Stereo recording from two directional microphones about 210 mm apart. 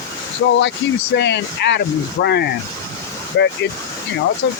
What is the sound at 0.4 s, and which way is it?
Speech, 60° left (ahead or behind).